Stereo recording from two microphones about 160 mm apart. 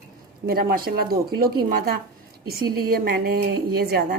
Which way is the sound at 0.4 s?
70° right (ahead or behind).